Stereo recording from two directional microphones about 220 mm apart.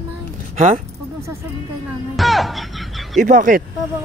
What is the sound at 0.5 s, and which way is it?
Speech, 30° right (ahead or behind).